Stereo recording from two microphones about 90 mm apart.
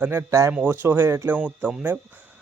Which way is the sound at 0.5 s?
20° right (ahead or behind).